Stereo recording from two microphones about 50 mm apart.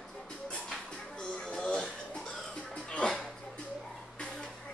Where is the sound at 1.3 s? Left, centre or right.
Centre.